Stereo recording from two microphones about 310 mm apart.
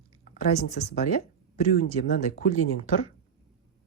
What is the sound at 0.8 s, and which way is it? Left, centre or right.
Speech, left.